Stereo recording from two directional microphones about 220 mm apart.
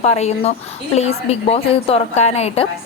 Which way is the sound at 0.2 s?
30° left (ahead or behind).